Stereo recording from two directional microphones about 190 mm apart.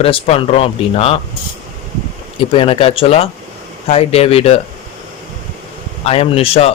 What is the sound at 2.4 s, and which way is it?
A man's voice, 30° left (ahead or behind).